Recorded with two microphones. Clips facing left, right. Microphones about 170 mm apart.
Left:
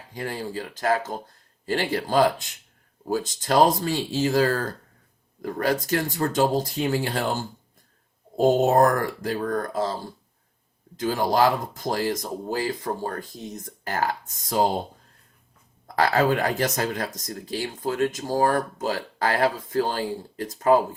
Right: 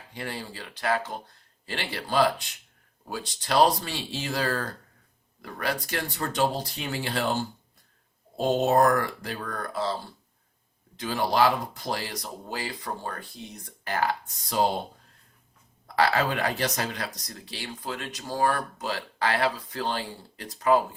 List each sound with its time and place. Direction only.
0.1 s speech: 40° left (ahead or behind)
8.4 s speech: 45° left (ahead or behind)
16.0 s speech: 45° left (ahead or behind)